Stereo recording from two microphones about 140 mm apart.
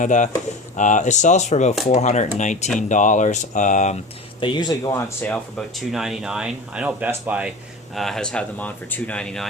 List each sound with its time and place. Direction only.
0.0 s speech: 60° left (ahead or behind)
4.4 s speech: 35° left (ahead or behind)
5.2 s speech: 5° left (ahead or behind); by 7.5 s 10° right (ahead or behind)
7.9 s speech: centre (ahead or behind)